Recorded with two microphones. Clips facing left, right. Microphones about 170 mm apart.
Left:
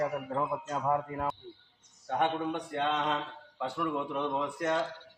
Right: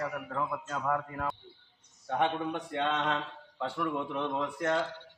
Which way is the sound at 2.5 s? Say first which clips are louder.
Even; centre (ahead or behind).